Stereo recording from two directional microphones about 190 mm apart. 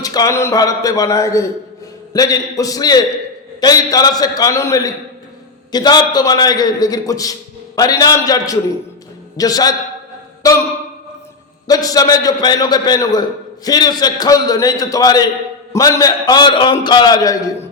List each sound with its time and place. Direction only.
0.0 s a man's voice: 20° left (ahead or behind)
11.7 s a man's voice: 20° left (ahead or behind)